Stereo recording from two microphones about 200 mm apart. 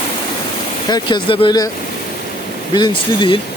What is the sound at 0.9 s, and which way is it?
Speech, 20° left (ahead or behind).